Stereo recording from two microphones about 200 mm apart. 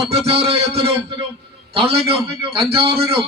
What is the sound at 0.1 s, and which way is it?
A man's voice, 30° right (ahead or behind).